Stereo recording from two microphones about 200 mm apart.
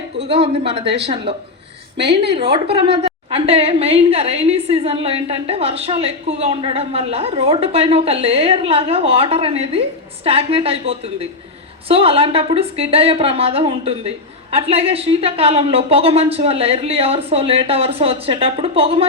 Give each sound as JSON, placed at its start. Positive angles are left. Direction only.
{"t": 0.2, "sound": "a woman's voice", "side_deg": -30}